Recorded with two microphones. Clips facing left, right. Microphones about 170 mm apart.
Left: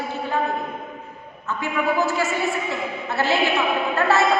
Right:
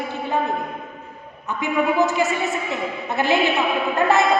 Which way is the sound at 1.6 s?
20° right (ahead or behind).